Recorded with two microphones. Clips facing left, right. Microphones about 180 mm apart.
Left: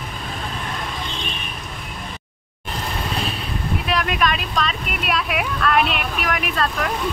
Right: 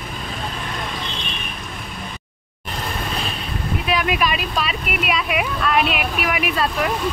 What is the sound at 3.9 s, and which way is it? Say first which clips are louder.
Speech: right 1 dB; 5° right (ahead or behind).